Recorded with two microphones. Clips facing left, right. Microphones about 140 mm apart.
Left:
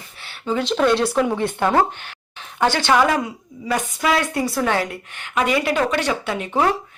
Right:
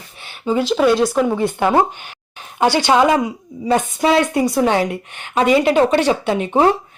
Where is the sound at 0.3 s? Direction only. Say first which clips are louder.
Right 4 dB; 10° right (ahead or behind).